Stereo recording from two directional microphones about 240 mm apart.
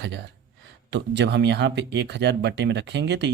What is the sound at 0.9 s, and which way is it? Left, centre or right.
Speech, right.